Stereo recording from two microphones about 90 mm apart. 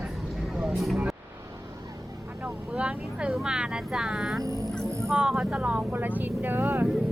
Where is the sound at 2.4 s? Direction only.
15° right (ahead or behind).